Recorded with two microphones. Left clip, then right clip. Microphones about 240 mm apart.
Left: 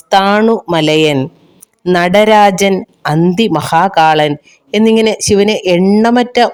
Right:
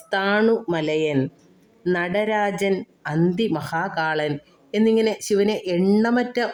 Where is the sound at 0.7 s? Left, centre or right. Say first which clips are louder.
Left 12 dB; left.